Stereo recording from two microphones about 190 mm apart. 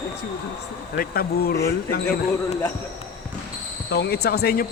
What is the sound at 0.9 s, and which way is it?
Speech, 50° left (ahead or behind).